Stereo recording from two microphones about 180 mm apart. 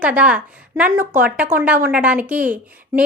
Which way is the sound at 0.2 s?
5° right (ahead or behind).